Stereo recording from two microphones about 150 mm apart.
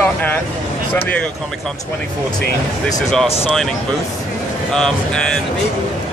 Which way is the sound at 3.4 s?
Centre (ahead or behind).